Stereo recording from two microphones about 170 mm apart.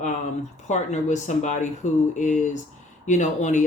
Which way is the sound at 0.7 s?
45° left (ahead or behind).